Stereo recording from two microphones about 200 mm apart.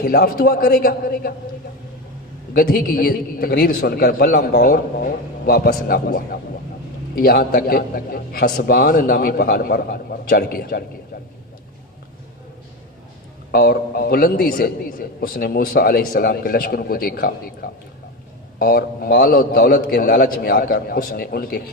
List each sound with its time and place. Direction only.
0.0 s a man's voice: 50° left (ahead or behind)
2.5 s a man's voice: 50° left (ahead or behind)
13.5 s a man's voice: 50° left (ahead or behind)